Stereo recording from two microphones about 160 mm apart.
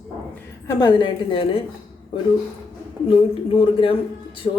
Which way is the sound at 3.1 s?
35° left (ahead or behind).